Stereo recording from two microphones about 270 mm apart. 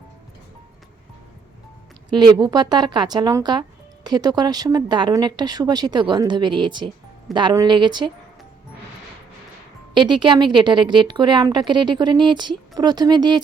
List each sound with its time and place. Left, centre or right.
2.0 s speech: centre
9.9 s speech: centre